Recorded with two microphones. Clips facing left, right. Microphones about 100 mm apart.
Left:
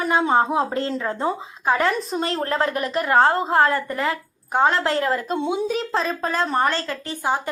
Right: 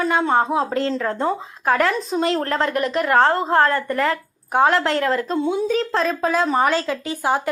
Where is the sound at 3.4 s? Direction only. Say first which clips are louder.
Right 1 dB; 15° left (ahead or behind).